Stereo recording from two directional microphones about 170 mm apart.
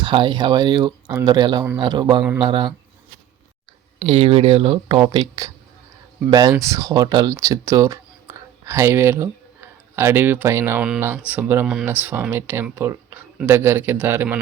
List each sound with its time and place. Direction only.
0.0 s speech: 30° right (ahead or behind)
4.0 s speech: 35° right (ahead or behind); by 14.3 s 10° right (ahead or behind)